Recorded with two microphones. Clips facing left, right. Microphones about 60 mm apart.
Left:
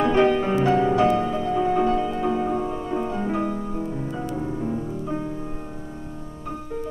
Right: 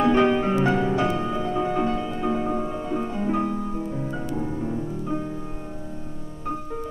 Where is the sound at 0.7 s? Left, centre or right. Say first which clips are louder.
Left 3 dB; left.